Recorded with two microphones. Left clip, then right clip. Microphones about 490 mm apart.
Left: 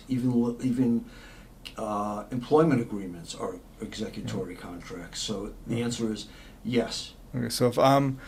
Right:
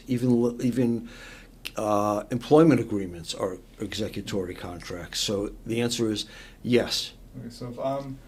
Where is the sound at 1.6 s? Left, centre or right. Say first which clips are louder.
Right 6 dB; right.